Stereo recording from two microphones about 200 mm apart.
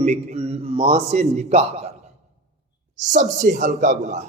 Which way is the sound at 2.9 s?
40° right (ahead or behind).